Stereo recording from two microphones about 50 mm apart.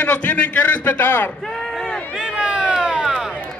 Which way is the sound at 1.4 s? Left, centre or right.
Centre.